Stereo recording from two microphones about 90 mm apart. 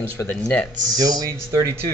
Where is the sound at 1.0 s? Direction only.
35° right (ahead or behind).